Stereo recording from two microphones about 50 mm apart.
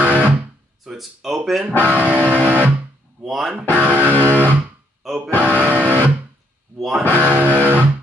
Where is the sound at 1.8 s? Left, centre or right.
Right.